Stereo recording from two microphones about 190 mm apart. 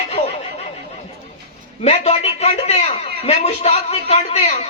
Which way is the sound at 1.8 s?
35° left (ahead or behind).